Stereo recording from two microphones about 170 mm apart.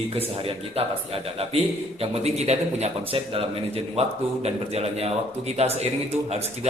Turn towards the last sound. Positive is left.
turn(degrees=-40)  # may be behind; listen again after turning